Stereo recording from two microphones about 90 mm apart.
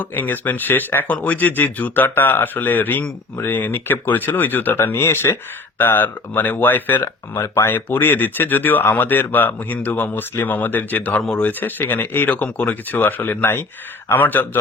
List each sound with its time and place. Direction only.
0.0 s speech: 20° left (ahead or behind)